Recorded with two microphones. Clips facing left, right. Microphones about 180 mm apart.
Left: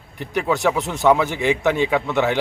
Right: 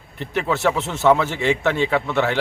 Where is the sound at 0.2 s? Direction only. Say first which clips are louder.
Left 1 dB; 15° left (ahead or behind).